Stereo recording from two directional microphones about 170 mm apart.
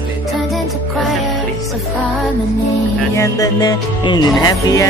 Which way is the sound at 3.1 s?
20° left (ahead or behind).